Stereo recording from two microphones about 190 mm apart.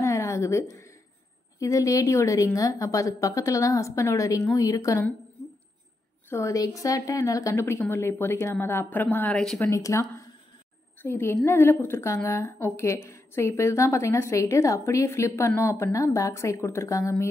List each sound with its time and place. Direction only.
0.0 s a sound: 15° left (ahead or behind)
1.6 s a woman's voice: 15° left (ahead or behind)
6.3 s a woman's voice: 15° left (ahead or behind)
9.7 s a woman's voice: 15° left (ahead or behind)